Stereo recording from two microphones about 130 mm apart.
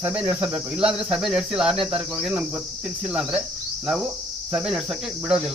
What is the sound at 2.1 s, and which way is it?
Speech, 10° right (ahead or behind).